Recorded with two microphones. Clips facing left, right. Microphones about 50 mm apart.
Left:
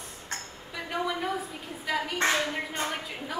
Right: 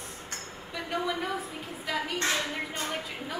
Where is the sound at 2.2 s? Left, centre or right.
Left.